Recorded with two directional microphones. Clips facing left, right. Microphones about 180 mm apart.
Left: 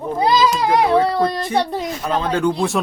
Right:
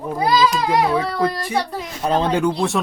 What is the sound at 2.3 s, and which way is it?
Speech, 15° right (ahead or behind).